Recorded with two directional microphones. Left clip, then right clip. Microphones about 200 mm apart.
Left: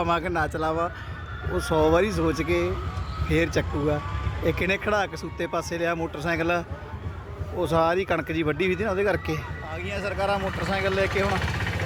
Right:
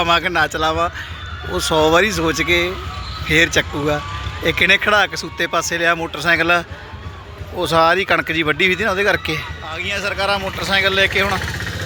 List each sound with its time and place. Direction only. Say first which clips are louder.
0.0 s speech: right 9 dB; centre (ahead or behind)
11.3 s vehicle: right 5 dB; 50° right (ahead or behind)